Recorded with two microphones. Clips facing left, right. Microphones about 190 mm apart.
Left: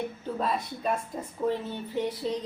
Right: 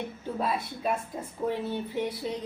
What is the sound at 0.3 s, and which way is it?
A woman's voice, 5° right (ahead or behind).